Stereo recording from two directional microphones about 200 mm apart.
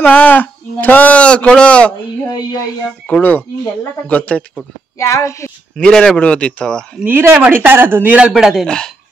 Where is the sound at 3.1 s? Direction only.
10° left (ahead or behind).